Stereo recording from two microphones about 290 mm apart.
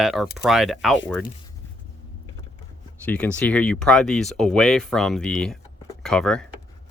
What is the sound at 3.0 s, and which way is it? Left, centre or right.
Speech, centre.